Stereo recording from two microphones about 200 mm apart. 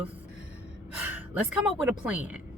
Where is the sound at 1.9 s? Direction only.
5° right (ahead or behind).